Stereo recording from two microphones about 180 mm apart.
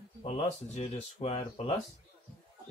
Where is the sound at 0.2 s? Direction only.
35° left (ahead or behind).